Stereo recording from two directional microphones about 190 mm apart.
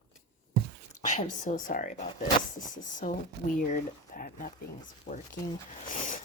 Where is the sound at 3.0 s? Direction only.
40° left (ahead or behind).